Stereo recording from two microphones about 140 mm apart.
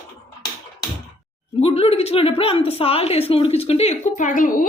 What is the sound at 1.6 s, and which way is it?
A woman's voice, 45° left (ahead or behind).